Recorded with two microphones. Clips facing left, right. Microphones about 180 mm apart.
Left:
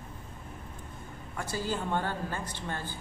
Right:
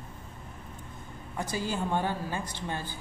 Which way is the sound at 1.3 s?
15° right (ahead or behind).